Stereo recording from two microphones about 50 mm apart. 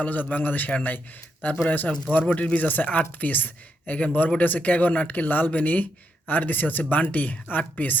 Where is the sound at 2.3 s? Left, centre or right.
Left.